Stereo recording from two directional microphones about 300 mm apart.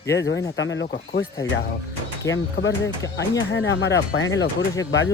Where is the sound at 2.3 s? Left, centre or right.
Left.